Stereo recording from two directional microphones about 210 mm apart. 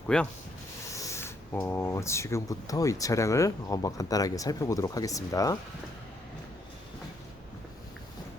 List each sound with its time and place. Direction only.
0.1 s speech: 5° left (ahead or behind)